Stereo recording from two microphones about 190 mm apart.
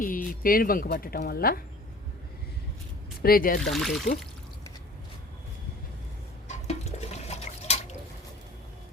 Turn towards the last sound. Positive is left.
turn(degrees=35)  # may be behind; listen again after turning